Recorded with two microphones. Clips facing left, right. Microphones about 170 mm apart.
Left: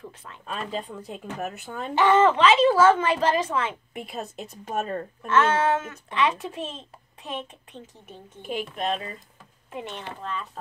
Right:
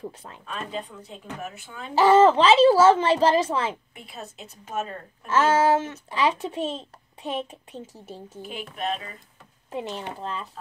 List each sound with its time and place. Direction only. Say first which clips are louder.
0.5 s speech: left 2 dB; 45° left (ahead or behind)
2.0 s a woman's voice: right 3 dB; 35° right (ahead or behind)
3.9 s a woman's voice: left 6 dB; 55° left (ahead or behind)
4.6 s speech: left 2 dB; 35° left (ahead or behind)
5.2 s a woman's voice: right 2 dB; 35° right (ahead or behind)
8.7 s speech: even; 40° left (ahead or behind)
9.7 s a woman's voice: right 4 dB; 35° right (ahead or behind)